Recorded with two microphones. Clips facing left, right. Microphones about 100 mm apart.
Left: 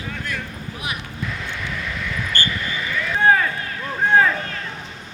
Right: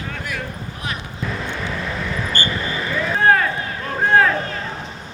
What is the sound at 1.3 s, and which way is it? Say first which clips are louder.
Vehicle: right 6 dB; 35° right (ahead or behind).